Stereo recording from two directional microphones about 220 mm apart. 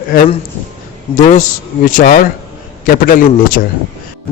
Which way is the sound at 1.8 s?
40° left (ahead or behind).